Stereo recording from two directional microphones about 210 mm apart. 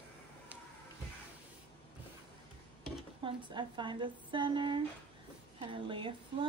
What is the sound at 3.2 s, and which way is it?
A woman's voice, 20° right (ahead or behind).